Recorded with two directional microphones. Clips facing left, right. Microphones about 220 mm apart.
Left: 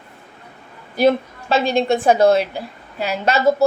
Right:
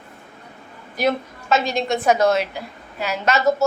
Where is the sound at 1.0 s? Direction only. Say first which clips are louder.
Left 6 dB; 30° left (ahead or behind).